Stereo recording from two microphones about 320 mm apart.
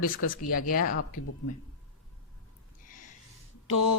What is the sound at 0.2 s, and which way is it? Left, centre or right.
Speech, left.